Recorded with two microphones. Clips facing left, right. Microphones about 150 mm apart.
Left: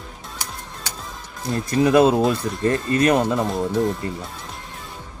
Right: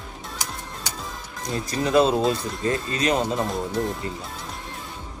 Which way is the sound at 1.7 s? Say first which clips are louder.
Left 4 dB; 55° left (ahead or behind).